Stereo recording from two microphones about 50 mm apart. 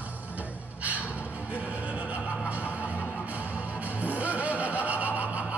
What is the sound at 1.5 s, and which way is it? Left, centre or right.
Music, right.